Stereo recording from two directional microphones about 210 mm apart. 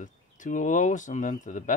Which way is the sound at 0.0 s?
35° left (ahead or behind).